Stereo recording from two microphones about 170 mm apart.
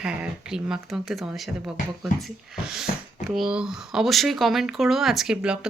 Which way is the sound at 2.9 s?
50° left (ahead or behind).